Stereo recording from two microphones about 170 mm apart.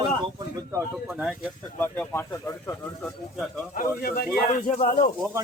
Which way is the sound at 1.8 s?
10° left (ahead or behind).